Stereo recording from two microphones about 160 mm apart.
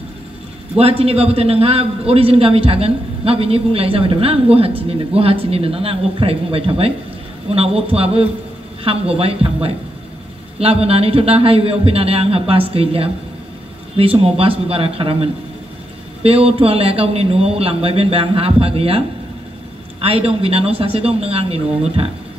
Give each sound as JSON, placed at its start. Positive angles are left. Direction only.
{"t": 0.7, "sound": "a man's voice", "side_deg": -40}